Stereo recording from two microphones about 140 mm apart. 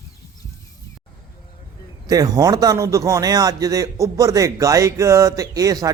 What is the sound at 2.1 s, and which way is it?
A man's voice, 25° right (ahead or behind).